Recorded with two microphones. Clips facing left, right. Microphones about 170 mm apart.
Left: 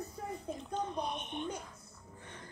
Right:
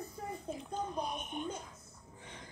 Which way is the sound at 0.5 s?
5° right (ahead or behind).